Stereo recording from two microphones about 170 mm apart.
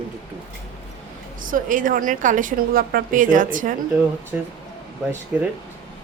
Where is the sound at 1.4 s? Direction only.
50° right (ahead or behind).